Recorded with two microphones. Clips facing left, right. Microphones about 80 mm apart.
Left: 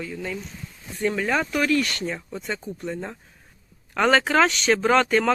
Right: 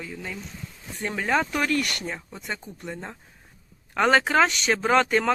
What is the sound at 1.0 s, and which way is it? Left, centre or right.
Speech, right.